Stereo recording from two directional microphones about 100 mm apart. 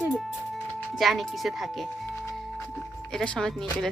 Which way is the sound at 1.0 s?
Centre (ahead or behind).